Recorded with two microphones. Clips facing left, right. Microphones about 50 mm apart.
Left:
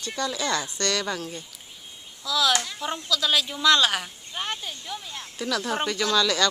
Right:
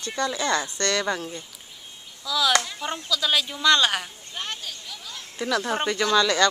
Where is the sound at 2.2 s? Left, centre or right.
Centre.